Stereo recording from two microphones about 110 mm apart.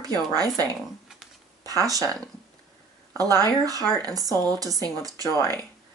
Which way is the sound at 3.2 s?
35° right (ahead or behind).